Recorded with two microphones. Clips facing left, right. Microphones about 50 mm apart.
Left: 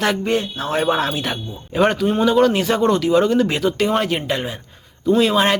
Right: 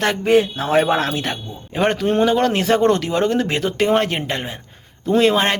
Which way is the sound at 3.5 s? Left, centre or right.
Right.